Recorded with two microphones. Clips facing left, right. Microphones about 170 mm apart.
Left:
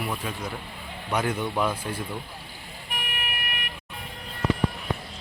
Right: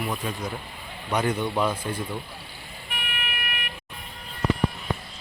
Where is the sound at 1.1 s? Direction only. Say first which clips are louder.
Right 2 dB; 5° left (ahead or behind).